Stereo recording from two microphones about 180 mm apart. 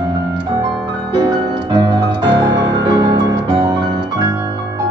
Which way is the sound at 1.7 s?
25° right (ahead or behind).